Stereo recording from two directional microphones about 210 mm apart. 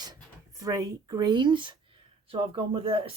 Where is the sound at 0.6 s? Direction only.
15° right (ahead or behind).